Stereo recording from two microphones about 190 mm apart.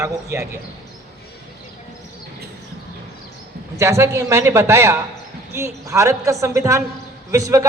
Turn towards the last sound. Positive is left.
turn(degrees=-15)  # may be behind; listen again after turning